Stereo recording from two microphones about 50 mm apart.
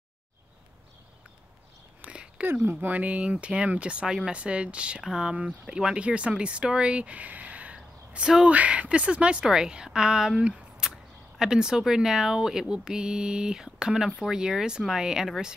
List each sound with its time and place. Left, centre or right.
2.0 s a sound: right
2.4 s speech: right
3.0 s speech: right